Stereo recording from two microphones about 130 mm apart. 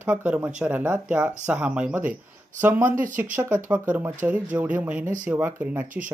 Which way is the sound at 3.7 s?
15° right (ahead or behind).